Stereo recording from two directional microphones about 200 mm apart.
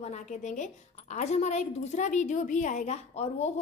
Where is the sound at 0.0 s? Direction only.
35° left (ahead or behind).